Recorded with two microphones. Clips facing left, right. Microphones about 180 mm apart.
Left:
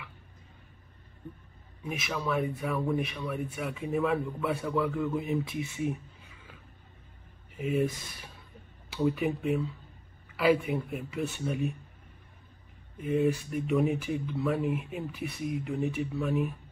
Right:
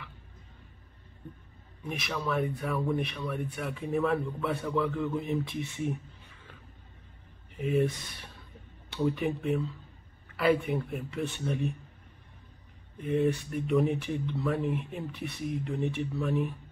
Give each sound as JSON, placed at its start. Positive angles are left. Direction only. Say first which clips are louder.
{"t": 1.8, "sound": "speech", "louder": "even", "side_deg": 0}
{"t": 7.5, "sound": "speech", "louder": "right 1 dB", "side_deg": 0}
{"t": 13.0, "sound": "speech", "louder": "even", "side_deg": 0}